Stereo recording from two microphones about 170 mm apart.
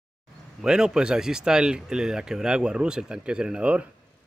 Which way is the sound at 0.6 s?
5° right (ahead or behind).